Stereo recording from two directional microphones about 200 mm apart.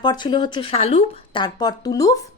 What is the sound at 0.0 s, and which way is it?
Speech, 20° left (ahead or behind).